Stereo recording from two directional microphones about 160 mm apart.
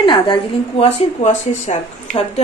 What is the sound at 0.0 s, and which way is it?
Speech, 30° left (ahead or behind).